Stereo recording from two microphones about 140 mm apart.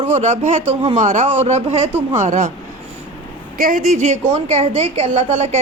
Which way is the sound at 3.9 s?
55° right (ahead or behind).